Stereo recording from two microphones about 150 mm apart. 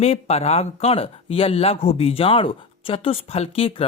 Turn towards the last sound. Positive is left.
turn(degrees=40)  # may be behind; listen again after turning